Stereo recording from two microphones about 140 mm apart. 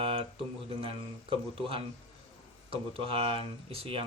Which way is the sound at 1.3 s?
40° right (ahead or behind).